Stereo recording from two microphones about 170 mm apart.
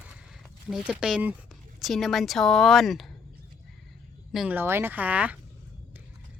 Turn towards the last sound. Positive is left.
turn(degrees=-10)  # may be behind; listen again after turning